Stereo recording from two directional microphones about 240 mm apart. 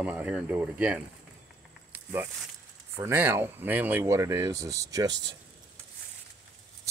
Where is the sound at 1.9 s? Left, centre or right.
Centre.